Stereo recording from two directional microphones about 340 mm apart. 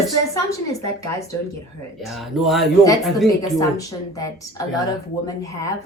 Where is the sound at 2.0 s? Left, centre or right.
Centre.